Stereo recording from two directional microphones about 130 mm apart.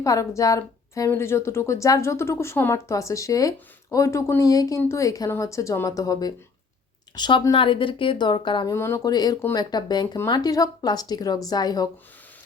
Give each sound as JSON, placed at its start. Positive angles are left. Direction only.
{"t": 0.0, "sound": "a woman's voice", "side_deg": 25}
{"t": 8.7, "sound": "a woman's voice", "side_deg": 20}